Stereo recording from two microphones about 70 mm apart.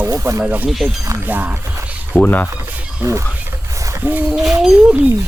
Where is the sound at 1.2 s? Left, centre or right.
Right.